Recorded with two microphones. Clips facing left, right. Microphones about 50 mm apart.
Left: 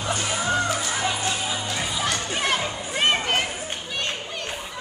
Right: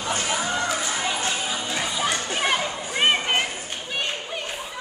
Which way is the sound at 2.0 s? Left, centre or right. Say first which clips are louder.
Right 1 dB; centre.